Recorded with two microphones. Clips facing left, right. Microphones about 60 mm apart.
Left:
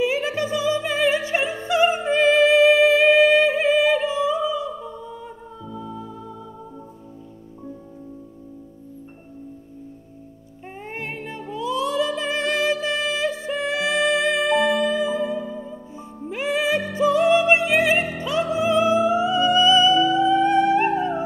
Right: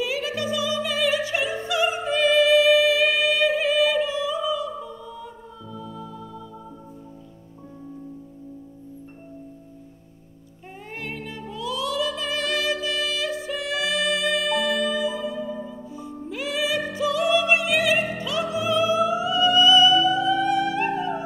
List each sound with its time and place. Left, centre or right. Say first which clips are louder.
0.0 s music: left 4 dB; left
11.0 s music: left 1 dB; left